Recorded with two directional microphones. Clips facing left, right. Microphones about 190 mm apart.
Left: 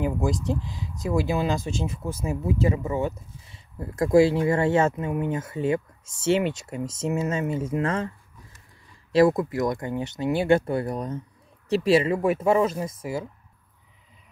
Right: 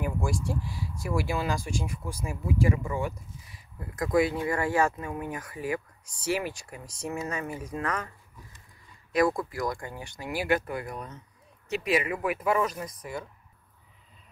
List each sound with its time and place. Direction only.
0.0 s speech: 20° left (ahead or behind)
9.1 s speech: 25° left (ahead or behind)